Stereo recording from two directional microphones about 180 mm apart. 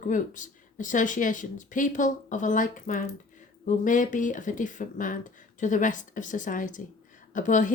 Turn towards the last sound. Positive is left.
turn(degrees=45)  # may be behind; listen again after turning